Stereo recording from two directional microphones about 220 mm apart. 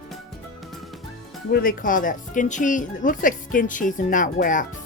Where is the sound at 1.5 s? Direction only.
40° left (ahead or behind).